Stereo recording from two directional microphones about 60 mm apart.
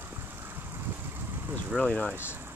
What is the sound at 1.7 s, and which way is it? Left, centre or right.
Speech, right.